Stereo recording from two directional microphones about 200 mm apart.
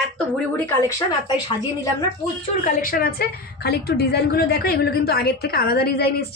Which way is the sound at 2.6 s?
45° left (ahead or behind).